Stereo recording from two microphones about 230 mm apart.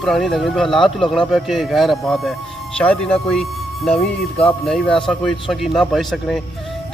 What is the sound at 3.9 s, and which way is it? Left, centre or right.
Speech, left.